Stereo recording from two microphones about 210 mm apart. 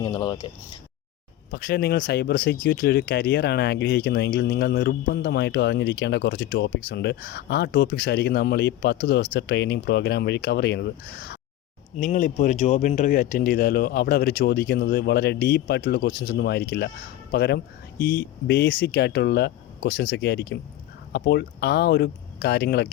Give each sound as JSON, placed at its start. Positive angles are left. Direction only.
{"t": 0.0, "sound": "speech", "side_deg": 20}
{"t": 1.5, "sound": "speech", "side_deg": 50}
{"t": 11.9, "sound": "speech", "side_deg": 35}